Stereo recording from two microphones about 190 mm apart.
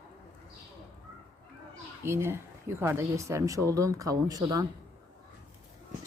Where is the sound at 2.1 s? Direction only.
15° right (ahead or behind).